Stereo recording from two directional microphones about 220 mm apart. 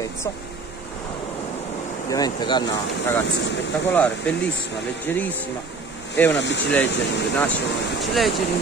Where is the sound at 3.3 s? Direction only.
50° left (ahead or behind).